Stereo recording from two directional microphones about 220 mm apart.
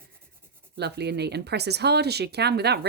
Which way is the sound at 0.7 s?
50° right (ahead or behind).